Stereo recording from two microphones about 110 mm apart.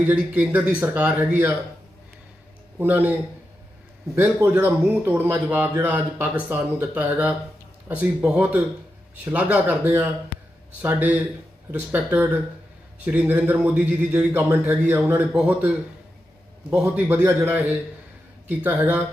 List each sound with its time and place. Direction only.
0.0 s a man's voice: 15° right (ahead or behind)
2.7 s a man's voice: 15° right (ahead or behind)
4.4 s a man's voice: 20° right (ahead or behind)
10.3 s a sound: 65° left (ahead or behind)
10.8 s a man's voice: 15° right (ahead or behind)
16.6 s a man's voice: 15° right (ahead or behind)